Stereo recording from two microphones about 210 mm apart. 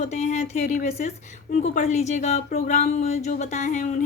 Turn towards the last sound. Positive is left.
turn(degrees=35)  # may be behind; listen again after turning